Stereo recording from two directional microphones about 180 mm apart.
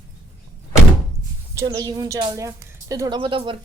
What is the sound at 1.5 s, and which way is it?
Speech, 20° right (ahead or behind).